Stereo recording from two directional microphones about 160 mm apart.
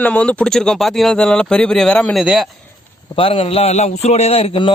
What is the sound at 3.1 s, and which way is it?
A man's voice, 35° left (ahead or behind).